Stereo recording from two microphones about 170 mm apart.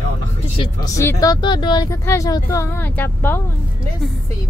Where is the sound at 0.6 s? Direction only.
25° left (ahead or behind); by 3.4 s 10° left (ahead or behind).